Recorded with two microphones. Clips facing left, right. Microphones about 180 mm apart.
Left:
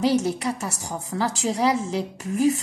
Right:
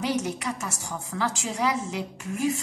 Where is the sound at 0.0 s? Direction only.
30° left (ahead or behind).